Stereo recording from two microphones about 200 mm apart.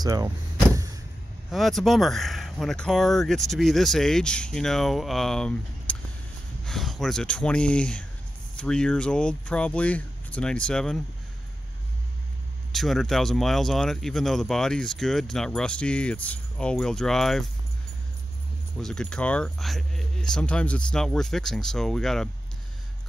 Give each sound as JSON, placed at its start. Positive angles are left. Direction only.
{"t": 0.0, "sound": "speech", "side_deg": -20}
{"t": 1.5, "sound": "speech", "side_deg": 0}
{"t": 12.7, "sound": "speech", "side_deg": 0}
{"t": 18.8, "sound": "speech", "side_deg": 5}